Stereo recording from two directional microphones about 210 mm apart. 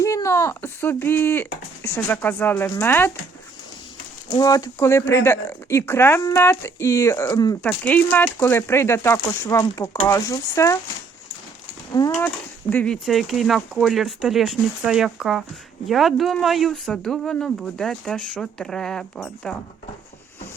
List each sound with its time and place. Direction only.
0.0 s speech: 15° left (ahead or behind)
4.4 s speech: 15° left (ahead or behind)
11.9 s speech: 20° left (ahead or behind)
12.7 s speech: 5° left (ahead or behind)